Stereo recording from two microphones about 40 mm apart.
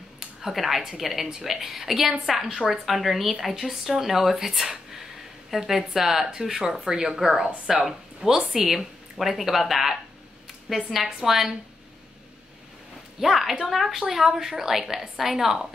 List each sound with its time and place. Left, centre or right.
0.4 s a woman's voice: centre
6.9 s speech: right
7.2 s speech: centre
8.3 s speech: centre
8.6 s a woman's voice: centre
13.2 s speech: centre